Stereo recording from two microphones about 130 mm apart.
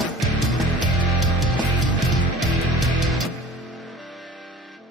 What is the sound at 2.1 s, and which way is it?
Music, centre (ahead or behind).